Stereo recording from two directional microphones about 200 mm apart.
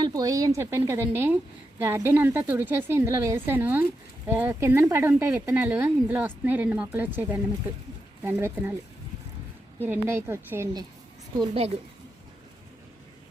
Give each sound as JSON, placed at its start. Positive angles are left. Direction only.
{"t": 0.0, "sound": "speech", "side_deg": -20}
{"t": 9.8, "sound": "speech", "side_deg": -10}
{"t": 11.3, "sound": "a woman's voice", "side_deg": -30}